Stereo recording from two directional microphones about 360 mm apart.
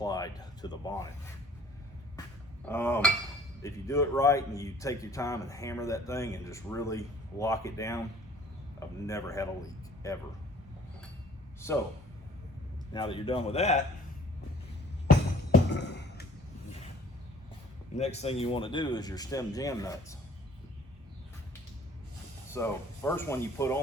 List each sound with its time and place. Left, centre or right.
0.0 s speech: centre
2.6 s speech: centre
11.6 s speech: centre
12.9 s speech: centre
15.7 s a sound: left
17.9 s speech: centre
22.5 s speech: centre